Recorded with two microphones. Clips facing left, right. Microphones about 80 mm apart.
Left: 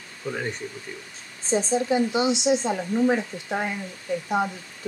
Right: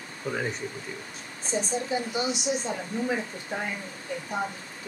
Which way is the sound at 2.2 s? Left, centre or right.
Left.